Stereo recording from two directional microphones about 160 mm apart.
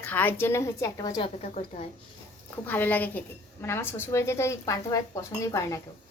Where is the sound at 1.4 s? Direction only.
40° left (ahead or behind).